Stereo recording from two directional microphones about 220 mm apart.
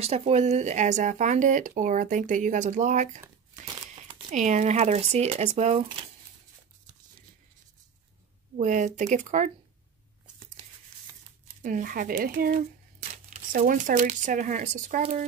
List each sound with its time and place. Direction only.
0.0 s speech: 30° right (ahead or behind)
3.5 s crumpling: 20° right (ahead or behind)
3.8 s speech: 25° right (ahead or behind)
8.5 s speech: 35° right (ahead or behind)
11.6 s speech: 40° right (ahead or behind)